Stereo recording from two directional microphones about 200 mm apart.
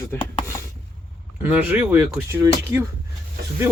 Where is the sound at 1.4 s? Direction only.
10° right (ahead or behind).